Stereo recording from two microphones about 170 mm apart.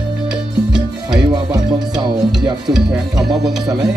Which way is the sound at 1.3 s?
25° right (ahead or behind).